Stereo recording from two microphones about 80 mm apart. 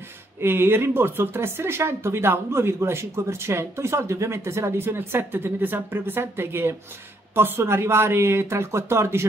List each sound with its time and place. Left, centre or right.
0.4 s speech: right